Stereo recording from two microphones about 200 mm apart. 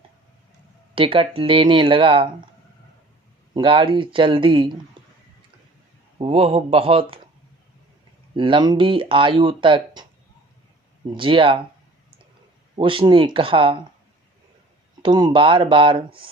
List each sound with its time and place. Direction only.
0.9 s speech: 25° right (ahead or behind)
3.5 s speech: 25° right (ahead or behind)
6.1 s speech: 30° right (ahead or behind)
8.4 s speech: 25° right (ahead or behind)
11.1 s speech: 25° right (ahead or behind)
12.7 s speech: 25° right (ahead or behind)
15.0 s speech: 25° right (ahead or behind)